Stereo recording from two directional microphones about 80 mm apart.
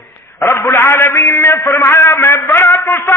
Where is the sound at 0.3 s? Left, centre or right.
Left.